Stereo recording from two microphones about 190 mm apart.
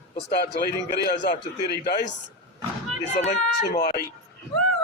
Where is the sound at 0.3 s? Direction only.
60° left (ahead or behind).